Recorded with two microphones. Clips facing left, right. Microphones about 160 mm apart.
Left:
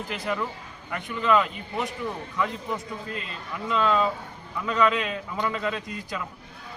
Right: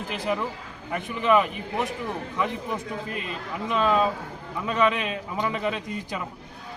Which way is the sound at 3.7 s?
15° right (ahead or behind).